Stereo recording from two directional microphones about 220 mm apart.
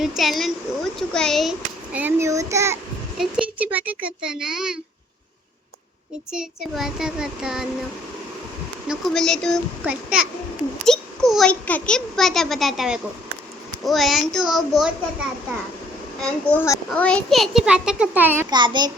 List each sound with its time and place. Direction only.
0.0 s a child's voice: centre (ahead or behind)
6.3 s a child's voice: 5° right (ahead or behind)
8.9 s a child's voice: centre (ahead or behind)
16.2 s a child's voice: 5° left (ahead or behind); by 18.4 s 10° right (ahead or behind)
18.5 s child singing: 20° right (ahead or behind)